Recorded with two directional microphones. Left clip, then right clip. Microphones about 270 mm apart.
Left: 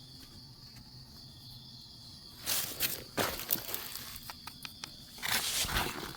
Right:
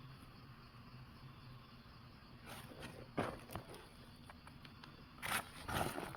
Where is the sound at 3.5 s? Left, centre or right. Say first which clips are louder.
Left 9 dB; centre.